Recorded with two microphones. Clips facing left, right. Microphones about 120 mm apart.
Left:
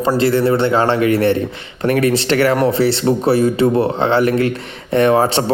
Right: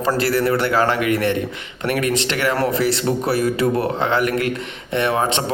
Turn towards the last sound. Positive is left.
turn(degrees=35)  # may be behind; listen again after turning